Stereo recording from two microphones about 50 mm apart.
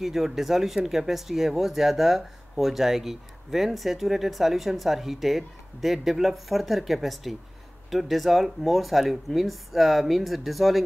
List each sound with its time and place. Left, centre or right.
0.0 s speech: centre